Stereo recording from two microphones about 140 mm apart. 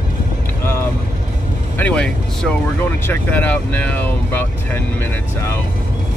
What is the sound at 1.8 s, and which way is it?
Speech, 10° left (ahead or behind).